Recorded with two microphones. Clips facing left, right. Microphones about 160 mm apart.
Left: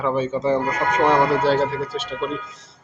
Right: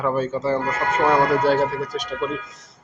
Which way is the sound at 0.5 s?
15° left (ahead or behind).